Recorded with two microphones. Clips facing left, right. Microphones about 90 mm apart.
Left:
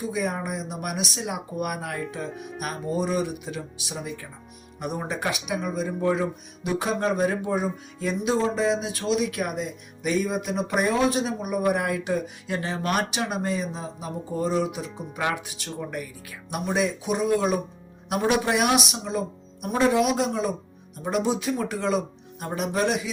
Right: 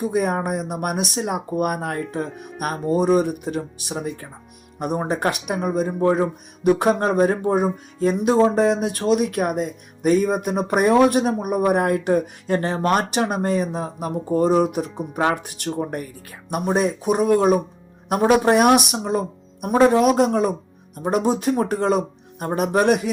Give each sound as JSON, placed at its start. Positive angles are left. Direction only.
{"t": 0.0, "sound": "speech", "side_deg": -50}